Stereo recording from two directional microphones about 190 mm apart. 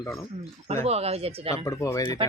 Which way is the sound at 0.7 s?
35° right (ahead or behind).